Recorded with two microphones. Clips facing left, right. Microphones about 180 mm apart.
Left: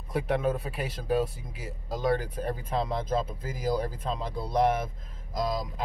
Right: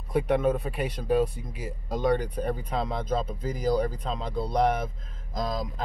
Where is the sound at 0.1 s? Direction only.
5° left (ahead or behind).